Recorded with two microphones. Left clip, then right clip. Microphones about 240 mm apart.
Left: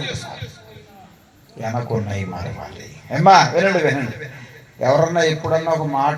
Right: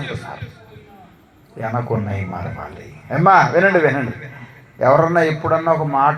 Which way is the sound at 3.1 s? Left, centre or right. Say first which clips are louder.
Even; centre.